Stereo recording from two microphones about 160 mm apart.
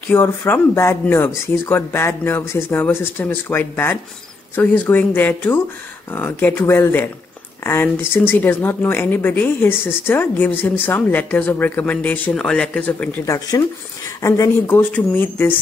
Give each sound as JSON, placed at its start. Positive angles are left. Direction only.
{"t": 0.1, "sound": "speech", "side_deg": 15}
{"t": 13.2, "sound": "speech", "side_deg": 20}